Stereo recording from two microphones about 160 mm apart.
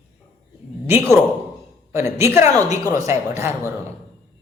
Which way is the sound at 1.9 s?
15° right (ahead or behind).